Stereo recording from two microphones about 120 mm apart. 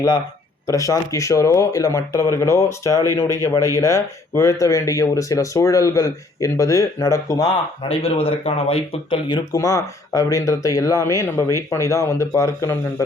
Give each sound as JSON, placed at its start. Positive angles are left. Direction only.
{"t": 0.7, "sound": "speech", "side_deg": 25}
{"t": 7.8, "sound": "speech", "side_deg": 50}
{"t": 9.5, "sound": "speech", "side_deg": 30}